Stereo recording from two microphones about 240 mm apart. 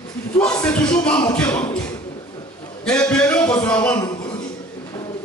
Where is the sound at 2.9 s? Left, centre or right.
Centre.